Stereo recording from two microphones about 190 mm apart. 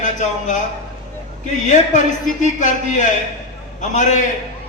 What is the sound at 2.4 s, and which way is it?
A man's voice, 40° left (ahead or behind).